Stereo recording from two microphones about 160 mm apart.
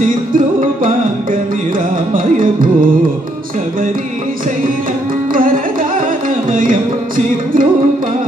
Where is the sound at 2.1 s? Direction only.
60° right (ahead or behind).